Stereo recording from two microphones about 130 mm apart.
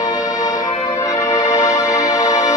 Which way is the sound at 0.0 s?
30° left (ahead or behind).